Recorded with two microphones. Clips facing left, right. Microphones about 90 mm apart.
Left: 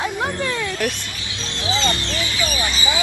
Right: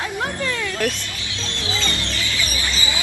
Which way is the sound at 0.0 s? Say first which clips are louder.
Left 2 dB; 20° left (ahead or behind).